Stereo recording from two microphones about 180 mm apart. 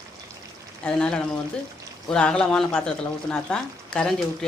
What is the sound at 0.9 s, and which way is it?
Speech, 5° left (ahead or behind).